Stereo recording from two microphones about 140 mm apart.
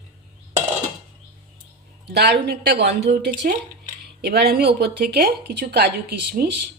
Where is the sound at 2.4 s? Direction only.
90° right.